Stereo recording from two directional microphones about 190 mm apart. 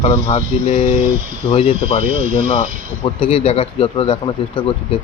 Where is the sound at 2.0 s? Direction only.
45° right (ahead or behind).